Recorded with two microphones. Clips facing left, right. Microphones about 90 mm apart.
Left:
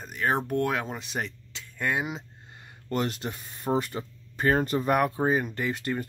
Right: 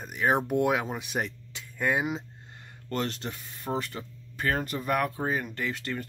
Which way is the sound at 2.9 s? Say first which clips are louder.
Left 2 dB; 10° left (ahead or behind).